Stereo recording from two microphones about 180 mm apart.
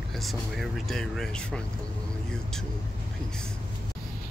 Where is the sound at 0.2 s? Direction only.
Centre (ahead or behind).